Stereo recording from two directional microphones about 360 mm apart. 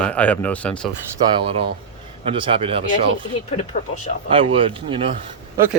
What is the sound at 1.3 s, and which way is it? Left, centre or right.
Speech, centre.